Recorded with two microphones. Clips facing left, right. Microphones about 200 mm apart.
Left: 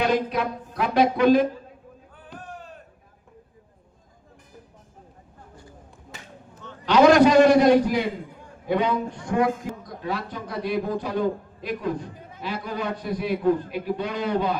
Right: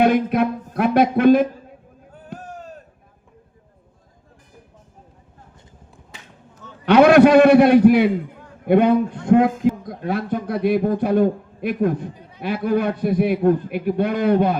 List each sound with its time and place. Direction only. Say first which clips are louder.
0.0 s speech: right 6 dB; 55° right (ahead or behind)
6.8 s a man's voice: right 4 dB; 60° right (ahead or behind)